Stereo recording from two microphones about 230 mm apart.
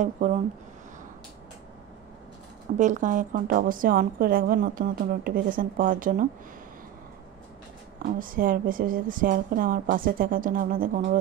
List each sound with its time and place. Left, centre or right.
0.0 s a woman's voice: right
2.8 s a woman's voice: right
8.0 s a woman's voice: right